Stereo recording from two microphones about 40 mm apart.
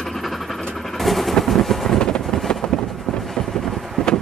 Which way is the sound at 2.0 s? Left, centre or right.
Left.